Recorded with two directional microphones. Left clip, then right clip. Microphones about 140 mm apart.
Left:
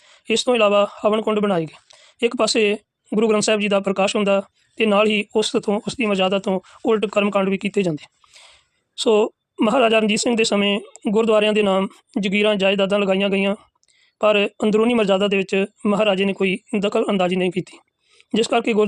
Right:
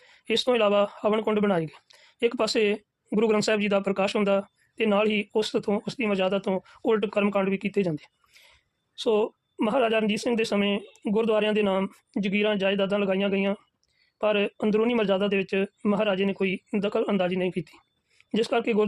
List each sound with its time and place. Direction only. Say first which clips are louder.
0.0 s speech: left 5 dB; 20° left (ahead or behind)